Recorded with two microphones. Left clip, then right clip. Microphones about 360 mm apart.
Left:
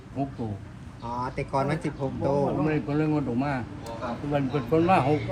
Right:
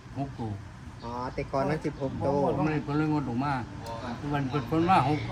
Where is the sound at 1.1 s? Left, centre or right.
Left.